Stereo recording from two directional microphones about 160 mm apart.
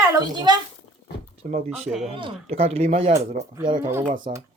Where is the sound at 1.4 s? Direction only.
55° right (ahead or behind).